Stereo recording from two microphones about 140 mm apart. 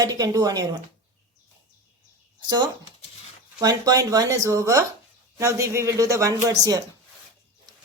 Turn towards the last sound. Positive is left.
turn(degrees=-25)  # may be behind; listen again after turning